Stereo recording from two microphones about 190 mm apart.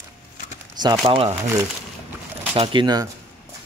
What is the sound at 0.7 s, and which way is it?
Speech, 20° right (ahead or behind).